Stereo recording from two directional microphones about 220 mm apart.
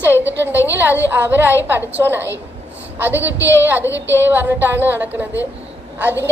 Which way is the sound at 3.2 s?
55° right (ahead or behind).